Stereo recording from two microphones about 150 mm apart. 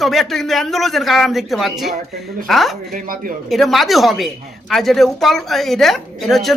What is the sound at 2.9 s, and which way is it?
Speech, 75° right (ahead or behind).